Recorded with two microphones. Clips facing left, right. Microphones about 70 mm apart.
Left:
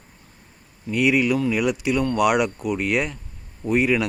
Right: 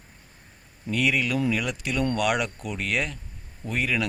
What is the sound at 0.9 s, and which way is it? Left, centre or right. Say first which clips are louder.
Speech: left 5 dB; centre.